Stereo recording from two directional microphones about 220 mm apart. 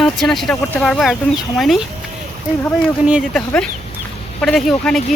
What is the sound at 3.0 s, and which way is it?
Speech, centre (ahead or behind).